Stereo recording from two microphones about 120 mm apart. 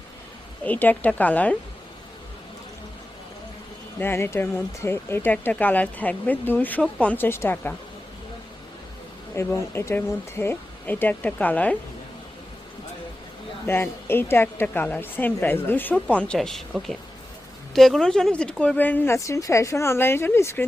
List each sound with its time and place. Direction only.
0.6 s a woman's voice: 15° left (ahead or behind)
4.0 s a woman's voice: 20° left (ahead or behind)
9.3 s a woman's voice: 25° left (ahead or behind)
13.7 s a woman's voice: 20° left (ahead or behind)